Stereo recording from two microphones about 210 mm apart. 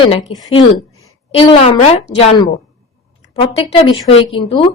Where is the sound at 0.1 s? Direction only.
25° left (ahead or behind).